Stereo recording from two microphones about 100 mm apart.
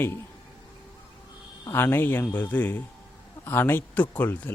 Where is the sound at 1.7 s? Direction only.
25° left (ahead or behind).